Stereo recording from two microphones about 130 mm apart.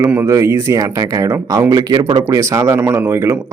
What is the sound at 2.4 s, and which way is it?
Speech, 25° right (ahead or behind).